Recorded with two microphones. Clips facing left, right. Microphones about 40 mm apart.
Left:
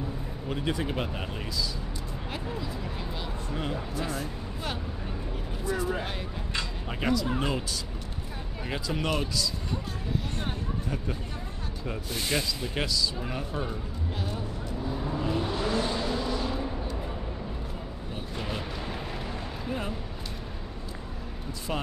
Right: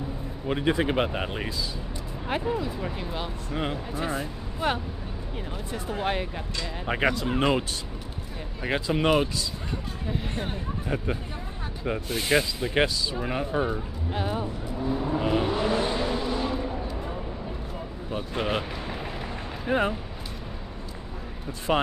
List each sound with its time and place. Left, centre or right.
0.5 s speech: right
6.9 s speech: right
11.8 s speech: right
14.7 s vehicle: centre
15.1 s vehicle: right
16.5 s a sound: centre
18.3 s speech: right
19.7 s speech: right
21.7 s speech: right